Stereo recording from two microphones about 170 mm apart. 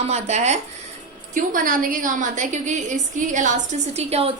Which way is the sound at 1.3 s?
55° right (ahead or behind).